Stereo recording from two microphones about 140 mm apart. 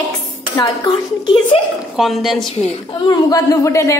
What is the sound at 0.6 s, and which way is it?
A woman's voice, 30° left (ahead or behind).